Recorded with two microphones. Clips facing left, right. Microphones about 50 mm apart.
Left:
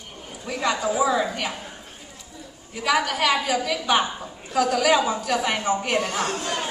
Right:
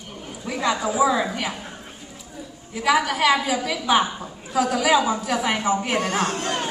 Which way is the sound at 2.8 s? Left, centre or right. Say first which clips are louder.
Right 2 dB; centre.